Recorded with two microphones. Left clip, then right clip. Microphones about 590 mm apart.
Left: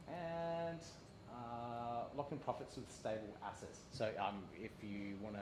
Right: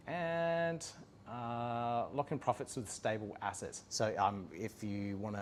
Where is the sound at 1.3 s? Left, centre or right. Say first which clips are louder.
Right 8 dB; right.